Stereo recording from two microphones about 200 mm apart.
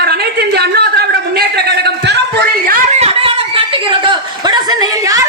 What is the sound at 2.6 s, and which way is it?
A woman's voice, 40° right (ahead or behind).